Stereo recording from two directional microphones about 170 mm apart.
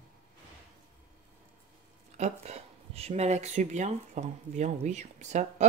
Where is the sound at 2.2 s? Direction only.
40° right (ahead or behind).